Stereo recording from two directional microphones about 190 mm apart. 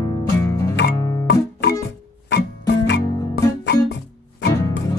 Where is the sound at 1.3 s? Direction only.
60° left (ahead or behind).